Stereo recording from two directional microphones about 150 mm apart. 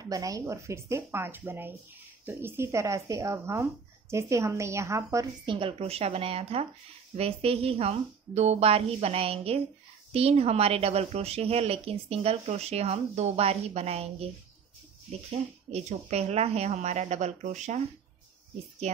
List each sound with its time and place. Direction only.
0.0 s speech: 25° right (ahead or behind)
5.4 s a woman's voice: 35° right (ahead or behind)
15.7 s speech: 45° right (ahead or behind)